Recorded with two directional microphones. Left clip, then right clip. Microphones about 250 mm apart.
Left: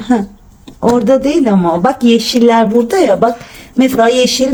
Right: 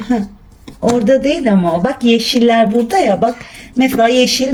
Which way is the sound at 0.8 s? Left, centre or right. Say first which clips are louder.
Left 2 dB; centre.